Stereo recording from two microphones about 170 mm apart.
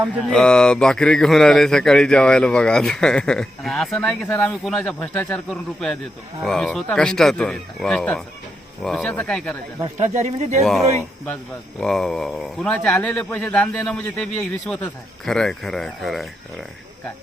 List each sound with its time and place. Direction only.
0.3 s speech: 5° left (ahead or behind)
9.8 s speech: 40° right (ahead or behind)
10.6 s speech: centre (ahead or behind)